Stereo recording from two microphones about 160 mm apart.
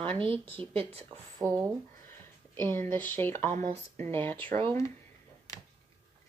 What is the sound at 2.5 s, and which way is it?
Speech, 15° left (ahead or behind).